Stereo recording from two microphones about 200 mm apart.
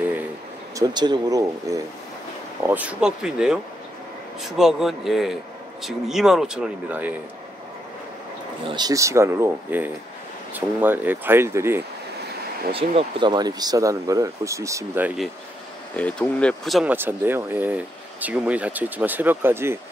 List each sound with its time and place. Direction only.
0.7 s a man's voice: 20° right (ahead or behind)
8.6 s speech: 20° right (ahead or behind)
12.7 s speech: 25° right (ahead or behind); by 15.2 s 10° right (ahead or behind)
16.0 s speech: 5° left (ahead or behind); by 19.8 s 10° right (ahead or behind)